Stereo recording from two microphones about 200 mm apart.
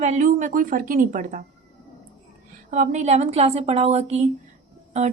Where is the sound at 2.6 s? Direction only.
35° right (ahead or behind).